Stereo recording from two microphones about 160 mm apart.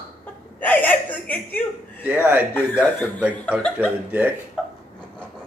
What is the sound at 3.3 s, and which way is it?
Speech, 5° left (ahead or behind).